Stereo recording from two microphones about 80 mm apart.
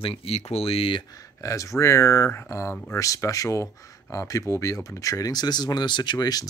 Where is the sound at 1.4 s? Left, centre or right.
Left.